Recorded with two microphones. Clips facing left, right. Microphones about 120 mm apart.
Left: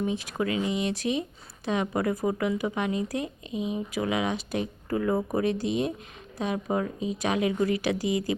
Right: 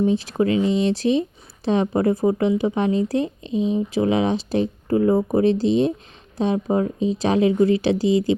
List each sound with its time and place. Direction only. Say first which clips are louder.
0.0 s speech: right 9 dB; 30° right (ahead or behind)